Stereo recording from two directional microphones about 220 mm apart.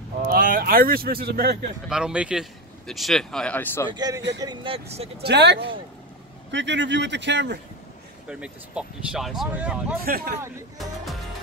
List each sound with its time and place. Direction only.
0.3 s speech: 40° right (ahead or behind)
1.9 s speech: 5° right (ahead or behind)
3.9 s a man's voice: 15° right (ahead or behind)
5.2 s speech: 50° right (ahead or behind)
8.3 s speech: 5° right (ahead or behind)
10.0 s speech: 45° right (ahead or behind)